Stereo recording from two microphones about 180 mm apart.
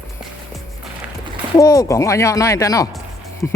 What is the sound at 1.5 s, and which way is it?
Speech, 20° left (ahead or behind).